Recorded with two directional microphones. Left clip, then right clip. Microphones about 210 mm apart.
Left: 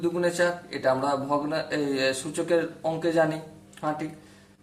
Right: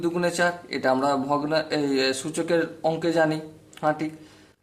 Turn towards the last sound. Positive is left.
turn(degrees=-40)  # may be behind; listen again after turning